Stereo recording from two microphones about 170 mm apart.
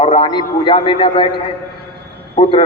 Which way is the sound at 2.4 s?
35° left (ahead or behind).